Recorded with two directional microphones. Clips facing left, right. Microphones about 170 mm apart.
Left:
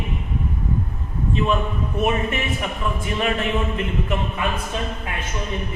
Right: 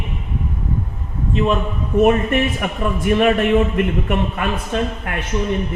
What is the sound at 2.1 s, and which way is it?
A man's voice, 55° right (ahead or behind).